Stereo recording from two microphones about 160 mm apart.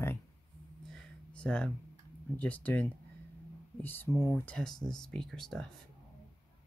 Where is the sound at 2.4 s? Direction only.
10° left (ahead or behind).